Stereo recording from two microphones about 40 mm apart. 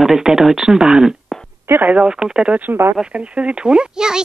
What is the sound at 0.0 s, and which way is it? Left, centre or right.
Speech, centre.